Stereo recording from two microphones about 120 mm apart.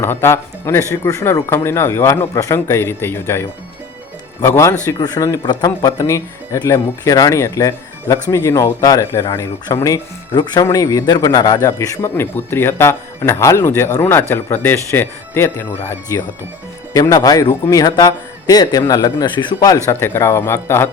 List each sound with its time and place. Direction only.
0.0 s a man's voice: 20° left (ahead or behind)
10.3 s a man's voice: 35° left (ahead or behind); by 20.9 s 20° left (ahead or behind)